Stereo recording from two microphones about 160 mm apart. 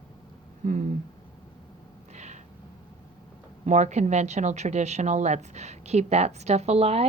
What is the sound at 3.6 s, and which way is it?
A woman's voice, 45° right (ahead or behind).